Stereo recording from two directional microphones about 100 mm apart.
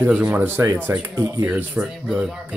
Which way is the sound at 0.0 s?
15° right (ahead or behind).